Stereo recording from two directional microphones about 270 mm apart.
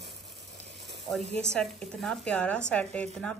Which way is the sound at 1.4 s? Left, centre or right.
Centre.